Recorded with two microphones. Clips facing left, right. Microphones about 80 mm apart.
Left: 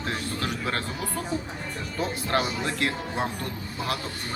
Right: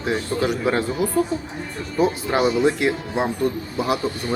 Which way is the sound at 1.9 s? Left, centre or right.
Centre.